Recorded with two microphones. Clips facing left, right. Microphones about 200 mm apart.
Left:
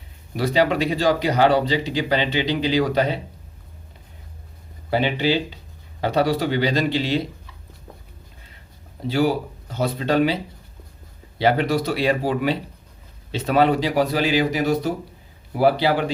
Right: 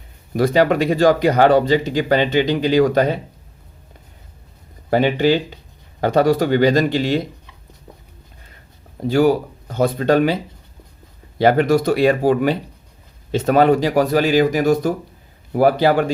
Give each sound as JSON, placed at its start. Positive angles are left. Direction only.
{"t": 0.3, "sound": "speech", "side_deg": -50}
{"t": 4.9, "sound": "speech", "side_deg": -50}
{"t": 9.0, "sound": "speech", "side_deg": -45}